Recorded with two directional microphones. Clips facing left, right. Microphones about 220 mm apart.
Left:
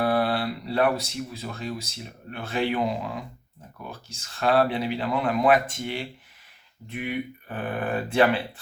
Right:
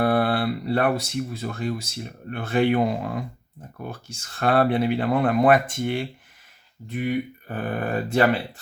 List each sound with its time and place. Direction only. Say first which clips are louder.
0.0 s speech: right 3 dB; 55° right (ahead or behind)
6.8 s speech: right 5 dB; 40° right (ahead or behind)